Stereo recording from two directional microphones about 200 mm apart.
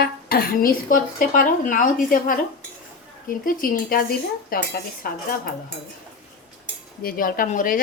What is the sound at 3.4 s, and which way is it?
Speech, 45° left (ahead or behind).